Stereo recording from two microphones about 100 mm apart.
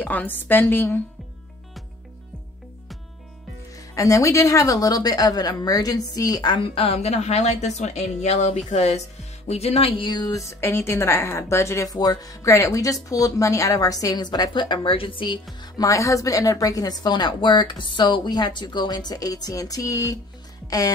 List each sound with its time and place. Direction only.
0.0 s a woman's voice: 15° left (ahead or behind)
3.9 s speech: 35° left (ahead or behind); by 10.2 s 60° left (ahead or behind)
10.2 s speech: 35° left (ahead or behind); by 15.4 s 55° left (ahead or behind)
15.8 s speech: 30° left (ahead or behind)